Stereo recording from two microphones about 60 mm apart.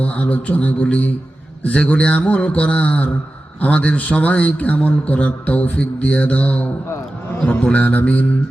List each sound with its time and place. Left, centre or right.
0.0 s a man's voice: left
7.7 s a man's voice: left